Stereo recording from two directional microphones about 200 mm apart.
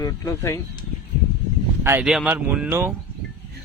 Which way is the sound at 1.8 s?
10° right (ahead or behind).